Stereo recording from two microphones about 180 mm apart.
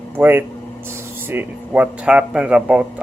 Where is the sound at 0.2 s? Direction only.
10° right (ahead or behind).